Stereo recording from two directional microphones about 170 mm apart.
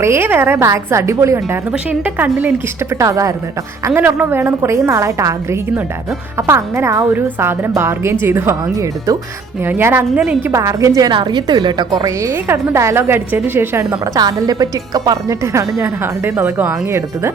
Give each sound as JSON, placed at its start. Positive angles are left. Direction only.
{"t": 0.0, "sound": "a woman's voice", "side_deg": -15}